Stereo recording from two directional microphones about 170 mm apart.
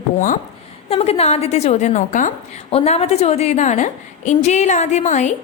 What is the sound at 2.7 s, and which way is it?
A woman's voice, 35° left (ahead or behind).